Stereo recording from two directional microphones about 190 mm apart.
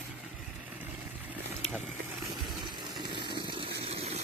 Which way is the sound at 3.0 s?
25° right (ahead or behind).